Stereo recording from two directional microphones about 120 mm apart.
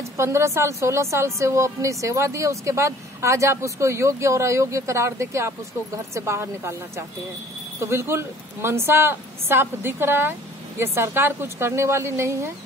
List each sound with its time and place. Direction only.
0.2 s speech: 20° right (ahead or behind)